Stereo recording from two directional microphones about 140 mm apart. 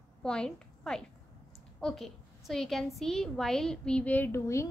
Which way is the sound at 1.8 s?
Centre (ahead or behind).